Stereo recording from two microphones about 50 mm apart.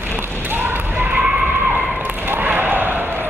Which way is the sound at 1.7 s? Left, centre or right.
Right.